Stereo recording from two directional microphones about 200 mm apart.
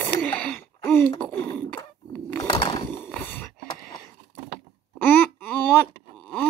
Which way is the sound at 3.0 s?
10° left (ahead or behind).